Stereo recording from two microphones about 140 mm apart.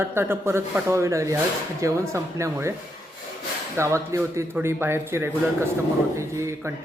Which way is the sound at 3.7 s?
20° right (ahead or behind).